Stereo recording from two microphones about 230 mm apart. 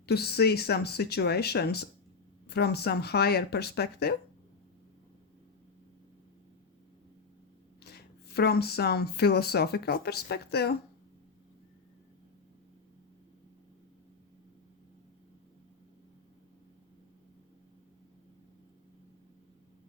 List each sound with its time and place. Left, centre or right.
0.0 s speech: left
8.4 s speech: left